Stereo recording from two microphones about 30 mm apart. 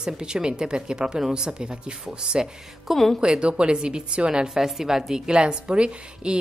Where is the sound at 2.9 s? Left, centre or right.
Centre.